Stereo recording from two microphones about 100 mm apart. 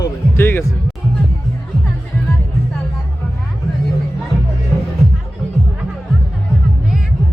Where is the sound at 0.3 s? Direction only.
25° left (ahead or behind).